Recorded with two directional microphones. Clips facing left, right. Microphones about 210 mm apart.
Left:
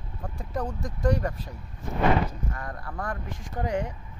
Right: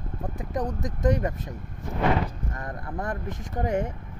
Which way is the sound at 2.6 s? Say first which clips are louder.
Right 5 dB; 20° right (ahead or behind).